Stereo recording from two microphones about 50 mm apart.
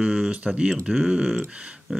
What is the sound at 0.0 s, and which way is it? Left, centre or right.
Speech, centre.